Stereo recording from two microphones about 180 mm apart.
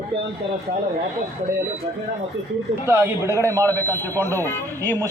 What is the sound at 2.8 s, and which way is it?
Speech, 10° right (ahead or behind).